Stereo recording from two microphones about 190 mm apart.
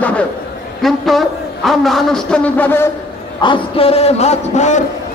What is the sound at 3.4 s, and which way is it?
A man's voice, 30° left (ahead or behind).